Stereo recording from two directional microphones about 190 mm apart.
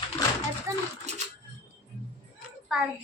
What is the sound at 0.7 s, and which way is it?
Speech, 15° right (ahead or behind).